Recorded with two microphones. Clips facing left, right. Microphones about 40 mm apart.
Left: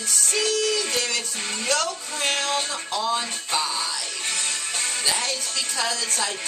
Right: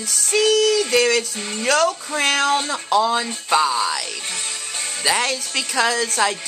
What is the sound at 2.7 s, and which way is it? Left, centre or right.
Speech, right.